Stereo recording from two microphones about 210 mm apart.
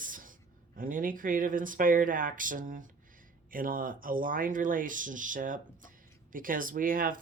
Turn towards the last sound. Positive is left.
turn(degrees=-40)  # may be behind; listen again after turning